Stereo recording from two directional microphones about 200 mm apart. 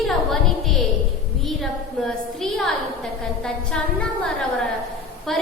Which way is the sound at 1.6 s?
Centre (ahead or behind).